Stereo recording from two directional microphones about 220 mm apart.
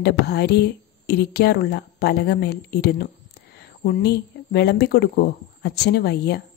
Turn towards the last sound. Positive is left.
turn(degrees=50)  # may be behind; listen again after turning